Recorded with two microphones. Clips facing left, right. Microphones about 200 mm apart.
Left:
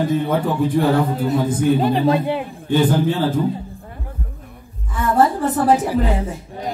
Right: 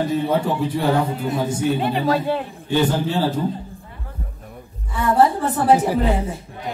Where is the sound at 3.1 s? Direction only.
50° left (ahead or behind).